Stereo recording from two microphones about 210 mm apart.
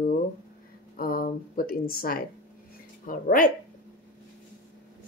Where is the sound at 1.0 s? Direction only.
45° left (ahead or behind).